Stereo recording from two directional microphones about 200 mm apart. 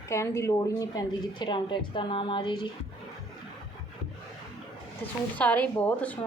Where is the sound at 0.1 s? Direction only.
15° left (ahead or behind).